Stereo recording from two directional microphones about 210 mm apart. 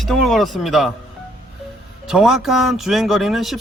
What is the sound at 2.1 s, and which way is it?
A man's voice, centre (ahead or behind).